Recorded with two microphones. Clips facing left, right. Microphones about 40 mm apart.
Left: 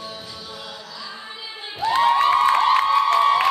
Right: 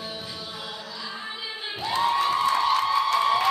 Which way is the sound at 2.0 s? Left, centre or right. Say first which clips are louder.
Left 6 dB; left.